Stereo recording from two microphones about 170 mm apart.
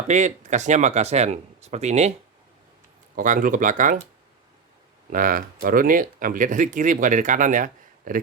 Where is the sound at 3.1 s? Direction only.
50° right (ahead or behind).